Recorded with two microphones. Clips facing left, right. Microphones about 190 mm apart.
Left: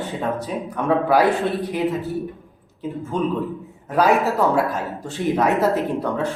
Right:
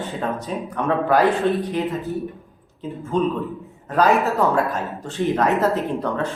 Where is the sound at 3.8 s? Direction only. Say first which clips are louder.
Even; 10° left (ahead or behind).